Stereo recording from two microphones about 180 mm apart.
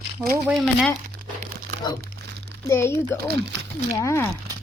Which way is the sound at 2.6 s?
15° left (ahead or behind).